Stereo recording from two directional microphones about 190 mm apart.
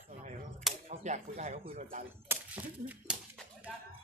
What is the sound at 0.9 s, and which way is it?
Speech, 40° right (ahead or behind).